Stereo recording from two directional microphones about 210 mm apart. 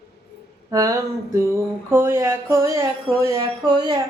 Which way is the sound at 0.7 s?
15° right (ahead or behind).